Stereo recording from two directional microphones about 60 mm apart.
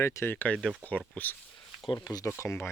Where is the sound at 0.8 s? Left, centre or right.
Right.